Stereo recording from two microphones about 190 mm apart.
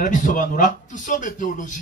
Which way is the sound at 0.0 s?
45° left (ahead or behind).